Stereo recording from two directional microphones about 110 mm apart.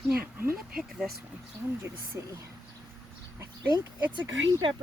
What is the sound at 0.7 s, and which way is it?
Speech, 5° right (ahead or behind).